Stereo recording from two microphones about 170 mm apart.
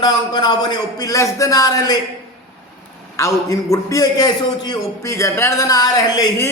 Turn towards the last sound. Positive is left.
turn(degrees=25)  # may be behind; listen again after turning